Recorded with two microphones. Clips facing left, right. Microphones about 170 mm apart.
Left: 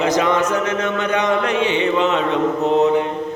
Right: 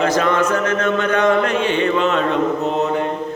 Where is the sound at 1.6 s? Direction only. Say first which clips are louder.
Even; 20° left (ahead or behind).